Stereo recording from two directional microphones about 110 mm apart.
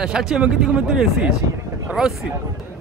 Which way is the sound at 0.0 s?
5° right (ahead or behind).